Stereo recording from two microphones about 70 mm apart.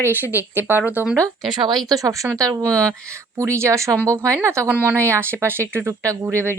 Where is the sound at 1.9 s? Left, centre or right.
Right.